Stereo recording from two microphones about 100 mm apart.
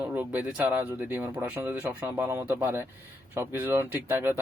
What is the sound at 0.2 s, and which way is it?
Speech, 15° right (ahead or behind).